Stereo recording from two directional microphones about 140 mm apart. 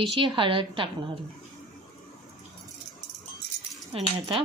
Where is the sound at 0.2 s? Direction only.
40° right (ahead or behind).